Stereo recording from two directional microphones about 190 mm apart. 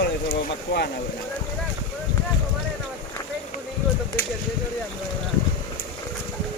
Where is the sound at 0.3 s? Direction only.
60° left (ahead or behind).